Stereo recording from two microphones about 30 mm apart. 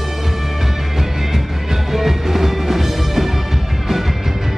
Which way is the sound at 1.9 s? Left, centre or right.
Centre.